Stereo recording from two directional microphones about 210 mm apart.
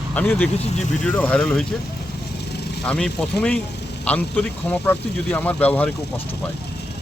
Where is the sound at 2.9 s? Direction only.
5° left (ahead or behind).